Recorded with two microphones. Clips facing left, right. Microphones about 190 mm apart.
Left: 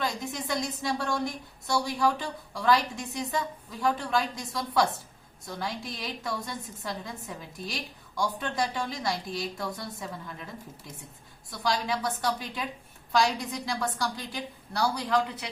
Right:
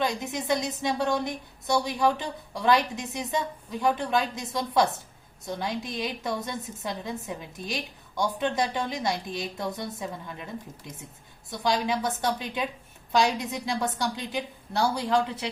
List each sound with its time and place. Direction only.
0.0 s a woman's voice: 20° right (ahead or behind)
11.5 s a woman's voice: 20° right (ahead or behind)